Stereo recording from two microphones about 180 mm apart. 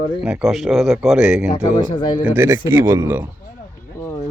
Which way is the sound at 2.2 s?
15° right (ahead or behind).